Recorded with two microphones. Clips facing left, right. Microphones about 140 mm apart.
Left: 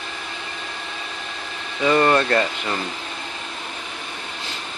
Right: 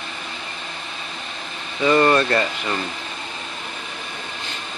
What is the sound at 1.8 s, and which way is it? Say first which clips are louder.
Speech: right 1 dB; 5° left (ahead or behind).